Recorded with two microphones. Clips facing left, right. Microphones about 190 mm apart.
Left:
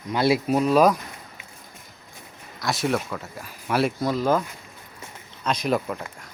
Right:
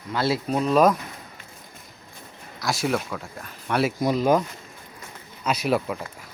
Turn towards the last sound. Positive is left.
turn(degrees=-5)  # may be behind; listen again after turning